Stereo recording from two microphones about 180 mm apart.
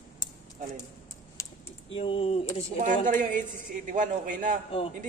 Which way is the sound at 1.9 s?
30° left (ahead or behind).